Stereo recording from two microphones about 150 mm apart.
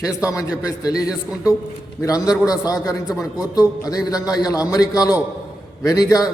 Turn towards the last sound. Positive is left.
turn(degrees=25)  # may be behind; listen again after turning